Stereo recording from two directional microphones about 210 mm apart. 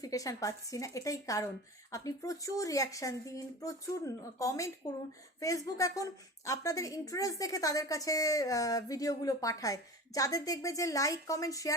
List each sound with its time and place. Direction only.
0.0 s a woman's voice: 15° left (ahead or behind)